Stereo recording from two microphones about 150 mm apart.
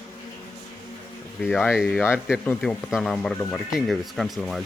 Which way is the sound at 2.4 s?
10° left (ahead or behind).